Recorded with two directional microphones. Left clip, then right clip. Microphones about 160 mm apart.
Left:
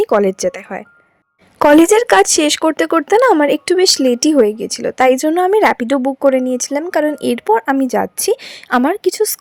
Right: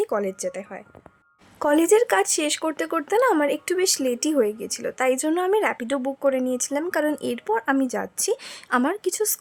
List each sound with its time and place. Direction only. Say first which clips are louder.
0.0 s a woman's voice: left 12 dB; 45° left (ahead or behind)